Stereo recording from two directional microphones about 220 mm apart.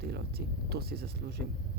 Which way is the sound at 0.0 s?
45° right (ahead or behind).